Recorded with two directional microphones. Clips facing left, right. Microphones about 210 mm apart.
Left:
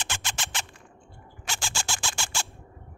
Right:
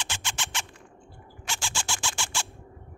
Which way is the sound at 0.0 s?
45° left (ahead or behind).